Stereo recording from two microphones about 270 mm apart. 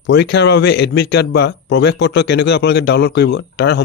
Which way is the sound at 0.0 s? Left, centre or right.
Left.